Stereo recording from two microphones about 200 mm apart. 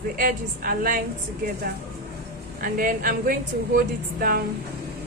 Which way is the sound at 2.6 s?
45° right (ahead or behind).